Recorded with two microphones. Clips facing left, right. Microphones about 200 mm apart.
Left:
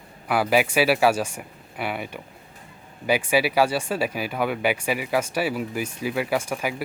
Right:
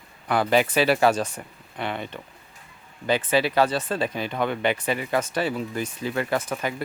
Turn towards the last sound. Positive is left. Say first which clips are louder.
# left 1 dB
turn(degrees=10)  # may be behind; listen again after turning